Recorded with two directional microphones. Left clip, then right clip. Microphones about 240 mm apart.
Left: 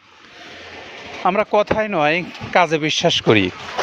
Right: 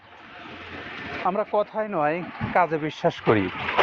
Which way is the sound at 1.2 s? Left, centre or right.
Left.